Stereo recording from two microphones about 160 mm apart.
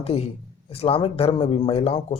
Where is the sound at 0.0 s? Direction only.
40° left (ahead or behind).